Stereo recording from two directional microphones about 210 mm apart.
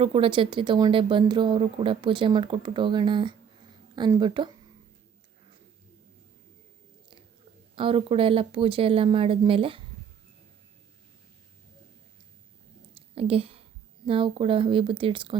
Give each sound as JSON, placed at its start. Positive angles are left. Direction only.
{"t": 0.0, "sound": "speech", "side_deg": -25}
{"t": 7.8, "sound": "speech", "side_deg": -25}
{"t": 12.9, "sound": "whispering", "side_deg": -25}
{"t": 14.1, "sound": "speech", "side_deg": -25}